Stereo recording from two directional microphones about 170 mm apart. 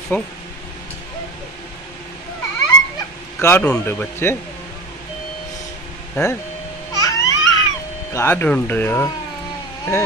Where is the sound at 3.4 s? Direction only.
10° left (ahead or behind).